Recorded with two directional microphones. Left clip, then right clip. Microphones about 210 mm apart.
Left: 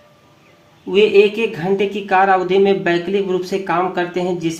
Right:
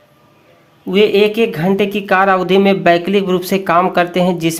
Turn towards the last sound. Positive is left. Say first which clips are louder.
# right 5 dB
turn(degrees=-50)  # may be behind; listen again after turning